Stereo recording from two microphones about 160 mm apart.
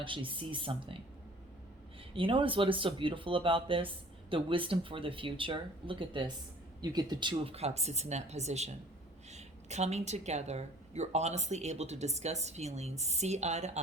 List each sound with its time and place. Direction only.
0.0 s speech: 30° right (ahead or behind)
2.1 s speech: 35° right (ahead or behind)